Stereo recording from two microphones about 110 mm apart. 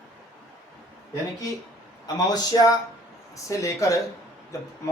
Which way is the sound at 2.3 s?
35° left (ahead or behind).